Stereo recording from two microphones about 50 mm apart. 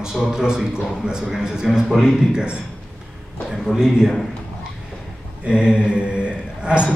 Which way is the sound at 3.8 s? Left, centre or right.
Centre.